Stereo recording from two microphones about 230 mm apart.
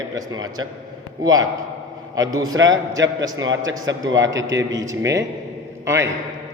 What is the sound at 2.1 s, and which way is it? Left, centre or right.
Speech, centre.